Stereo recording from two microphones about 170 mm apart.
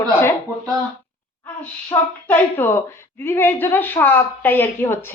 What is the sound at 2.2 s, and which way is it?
A woman's voice, 15° left (ahead or behind).